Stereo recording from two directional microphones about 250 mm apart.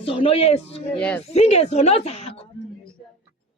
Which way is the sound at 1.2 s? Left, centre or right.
Left.